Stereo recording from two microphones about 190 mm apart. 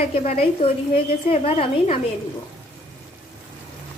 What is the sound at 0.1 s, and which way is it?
A woman's voice, 30° left (ahead or behind).